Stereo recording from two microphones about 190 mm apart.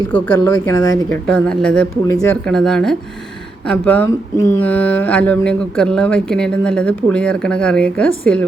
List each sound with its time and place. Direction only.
0.1 s speech: 10° left (ahead or behind)
1.1 s speech: 5° left (ahead or behind)